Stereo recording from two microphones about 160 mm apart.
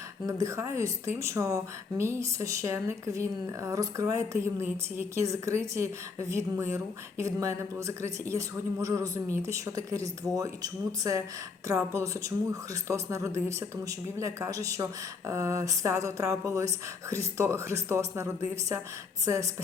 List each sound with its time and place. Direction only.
0.3 s speech: 20° right (ahead or behind)